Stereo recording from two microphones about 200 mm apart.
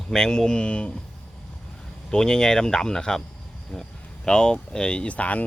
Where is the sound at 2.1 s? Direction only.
5° left (ahead or behind).